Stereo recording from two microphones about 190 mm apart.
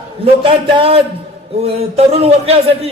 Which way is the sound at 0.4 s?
25° right (ahead or behind).